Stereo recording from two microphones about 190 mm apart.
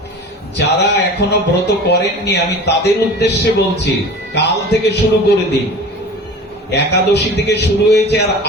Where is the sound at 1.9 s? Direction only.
60° left (ahead or behind).